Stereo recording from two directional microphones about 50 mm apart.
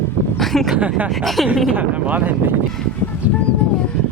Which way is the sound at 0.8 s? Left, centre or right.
Right.